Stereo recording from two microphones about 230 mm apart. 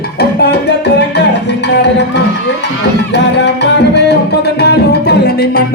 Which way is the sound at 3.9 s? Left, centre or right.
Left.